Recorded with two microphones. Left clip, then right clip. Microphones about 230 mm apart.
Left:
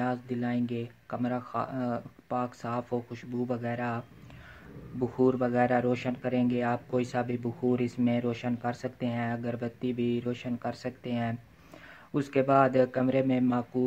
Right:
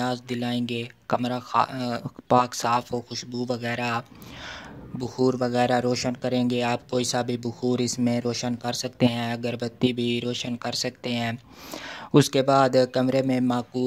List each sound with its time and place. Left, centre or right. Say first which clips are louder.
0.0 s speech: right 4 dB; right
5.0 s speech: right 2 dB; right